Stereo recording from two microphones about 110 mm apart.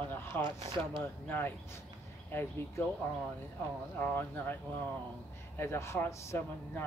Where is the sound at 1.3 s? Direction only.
20° left (ahead or behind).